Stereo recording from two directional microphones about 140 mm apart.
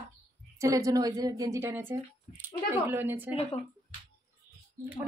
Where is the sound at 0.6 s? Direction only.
20° right (ahead or behind).